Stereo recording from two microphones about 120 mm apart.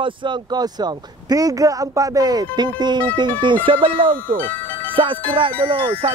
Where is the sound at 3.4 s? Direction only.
45° right (ahead or behind).